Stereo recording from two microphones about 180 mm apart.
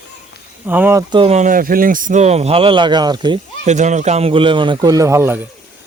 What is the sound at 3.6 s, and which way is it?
Speech, 40° right (ahead or behind).